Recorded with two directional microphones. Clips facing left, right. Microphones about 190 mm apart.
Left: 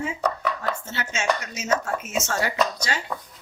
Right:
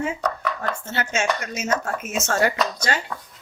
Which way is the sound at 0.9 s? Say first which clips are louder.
Right 3 dB; 55° right (ahead or behind).